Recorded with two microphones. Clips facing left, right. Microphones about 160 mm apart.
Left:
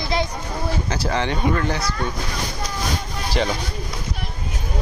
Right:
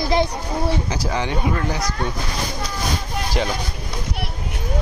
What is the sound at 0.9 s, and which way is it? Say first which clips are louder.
Speech: left 1 dB; 10° right (ahead or behind).